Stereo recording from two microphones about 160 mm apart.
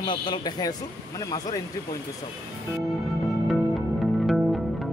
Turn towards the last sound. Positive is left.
turn(degrees=0)  # may be behind; listen again after turning